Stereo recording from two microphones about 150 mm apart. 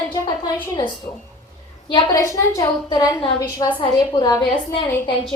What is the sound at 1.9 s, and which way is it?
A woman's voice, 25° left (ahead or behind).